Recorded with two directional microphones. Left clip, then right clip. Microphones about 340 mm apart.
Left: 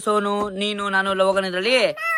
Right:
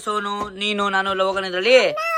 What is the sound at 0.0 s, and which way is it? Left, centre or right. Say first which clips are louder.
A man's voice: left 3 dB; centre.